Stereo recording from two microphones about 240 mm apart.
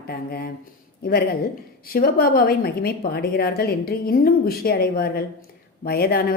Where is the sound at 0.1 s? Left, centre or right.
Left.